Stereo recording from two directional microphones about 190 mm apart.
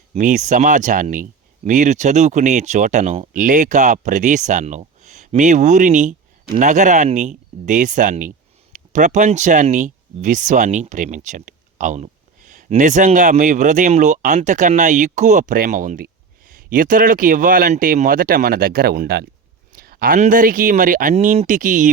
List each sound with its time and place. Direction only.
0.1 s speech: 40° right (ahead or behind)